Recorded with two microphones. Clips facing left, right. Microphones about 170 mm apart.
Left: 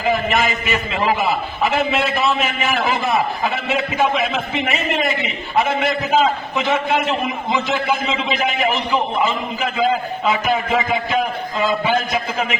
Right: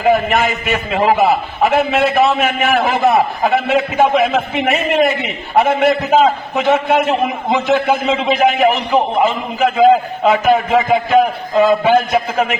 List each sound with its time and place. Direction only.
0.0 s a man's voice: 55° right (ahead or behind)